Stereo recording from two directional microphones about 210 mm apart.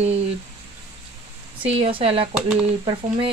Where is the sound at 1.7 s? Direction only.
25° right (ahead or behind).